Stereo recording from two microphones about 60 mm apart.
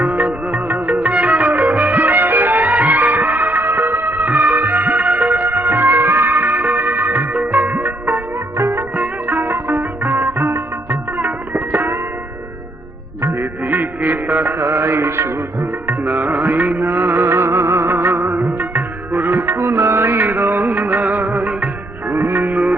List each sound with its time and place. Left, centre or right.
1.0 s music: right
3.7 s music: right
9.0 s music: right
13.2 s music: right
13.7 s music: right
14.6 s music: right
16.3 s music: right
17.1 s music: right
22.1 s music: right